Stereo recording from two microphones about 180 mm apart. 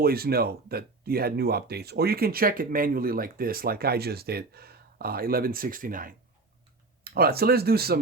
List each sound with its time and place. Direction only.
0.0 s speech: 60° right (ahead or behind)